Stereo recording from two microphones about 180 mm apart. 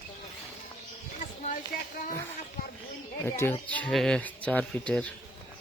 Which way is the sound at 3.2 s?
15° left (ahead or behind).